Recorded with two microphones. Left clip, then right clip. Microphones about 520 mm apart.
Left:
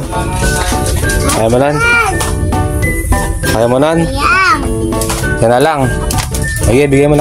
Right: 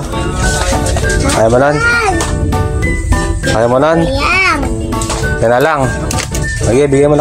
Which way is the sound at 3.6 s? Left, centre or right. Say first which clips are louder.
Right 1 dB; left.